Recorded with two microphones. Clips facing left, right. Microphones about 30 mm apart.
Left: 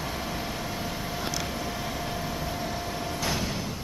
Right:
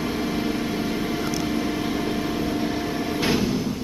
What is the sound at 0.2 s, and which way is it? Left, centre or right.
Vehicle, centre.